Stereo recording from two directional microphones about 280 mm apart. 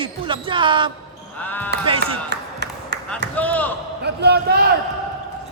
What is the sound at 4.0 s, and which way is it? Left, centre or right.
Speech, right.